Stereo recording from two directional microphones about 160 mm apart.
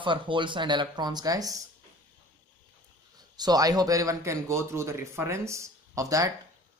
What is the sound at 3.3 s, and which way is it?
Speech, 25° right (ahead or behind).